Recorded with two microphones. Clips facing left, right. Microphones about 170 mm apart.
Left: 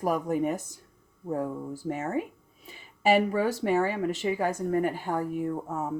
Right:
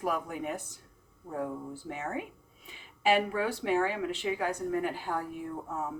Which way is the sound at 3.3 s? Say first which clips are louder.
Left 4 dB; 40° left (ahead or behind).